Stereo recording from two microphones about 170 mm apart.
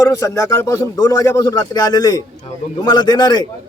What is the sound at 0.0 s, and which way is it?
A man's voice, 20° left (ahead or behind).